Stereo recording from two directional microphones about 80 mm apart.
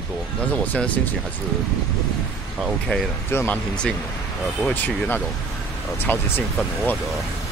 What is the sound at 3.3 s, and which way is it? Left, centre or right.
Speech, left.